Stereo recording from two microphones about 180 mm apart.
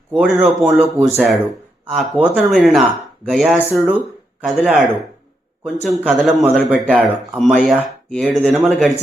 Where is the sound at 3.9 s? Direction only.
10° right (ahead or behind).